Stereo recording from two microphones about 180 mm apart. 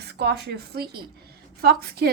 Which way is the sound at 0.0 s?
65° right (ahead or behind).